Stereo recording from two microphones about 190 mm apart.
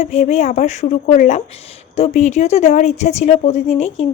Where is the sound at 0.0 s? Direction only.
35° left (ahead or behind).